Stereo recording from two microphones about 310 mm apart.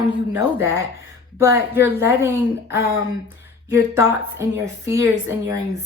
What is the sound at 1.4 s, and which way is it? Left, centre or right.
A woman's voice, centre.